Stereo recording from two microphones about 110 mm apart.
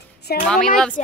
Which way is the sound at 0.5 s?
5° left (ahead or behind).